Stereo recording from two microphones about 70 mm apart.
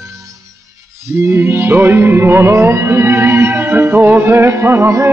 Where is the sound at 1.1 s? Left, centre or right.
Right.